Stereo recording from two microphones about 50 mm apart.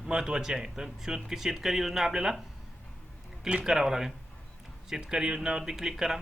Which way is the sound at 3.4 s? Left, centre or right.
Right.